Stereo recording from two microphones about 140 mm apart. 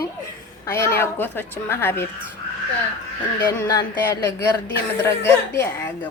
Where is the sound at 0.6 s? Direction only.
20° left (ahead or behind).